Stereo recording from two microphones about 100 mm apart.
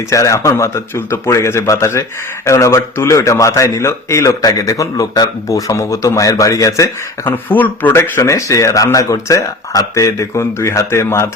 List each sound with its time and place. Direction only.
0.1 s a man's voice: 30° left (ahead or behind)
7.3 s speech: 20° left (ahead or behind)